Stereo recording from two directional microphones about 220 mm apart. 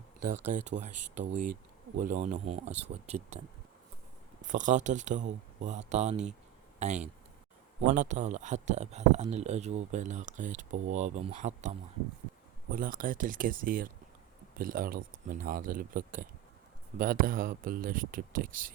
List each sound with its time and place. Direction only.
0.2 s speech: 90° right
0.5 s speech: 35° right (ahead or behind)
4.4 s speech: 35° right (ahead or behind)